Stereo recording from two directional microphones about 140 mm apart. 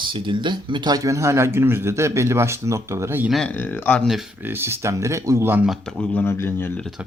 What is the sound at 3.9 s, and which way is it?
Speech, 15° left (ahead or behind).